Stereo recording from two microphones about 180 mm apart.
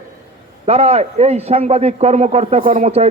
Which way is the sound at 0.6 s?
35° right (ahead or behind).